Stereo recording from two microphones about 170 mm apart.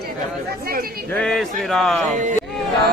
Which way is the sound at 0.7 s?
60° right (ahead or behind).